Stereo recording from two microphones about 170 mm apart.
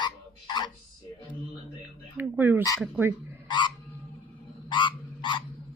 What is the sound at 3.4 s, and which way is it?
Frog, 25° left (ahead or behind).